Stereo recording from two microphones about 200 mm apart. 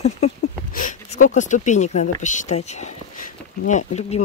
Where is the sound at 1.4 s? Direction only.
35° left (ahead or behind).